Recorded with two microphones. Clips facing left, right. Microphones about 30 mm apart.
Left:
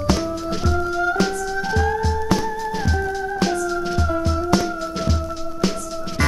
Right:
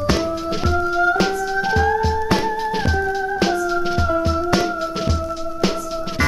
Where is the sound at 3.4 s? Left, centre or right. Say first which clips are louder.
Right 2 dB; centre.